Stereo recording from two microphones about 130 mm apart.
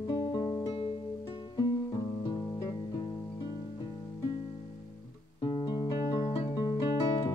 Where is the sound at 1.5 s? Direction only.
30° left (ahead or behind).